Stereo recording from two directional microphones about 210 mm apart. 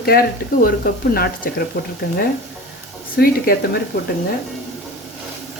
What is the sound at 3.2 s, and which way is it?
Speech, 45° left (ahead or behind).